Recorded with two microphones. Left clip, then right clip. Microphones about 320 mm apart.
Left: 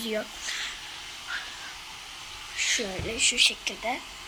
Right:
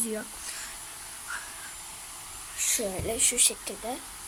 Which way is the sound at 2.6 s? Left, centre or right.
Centre.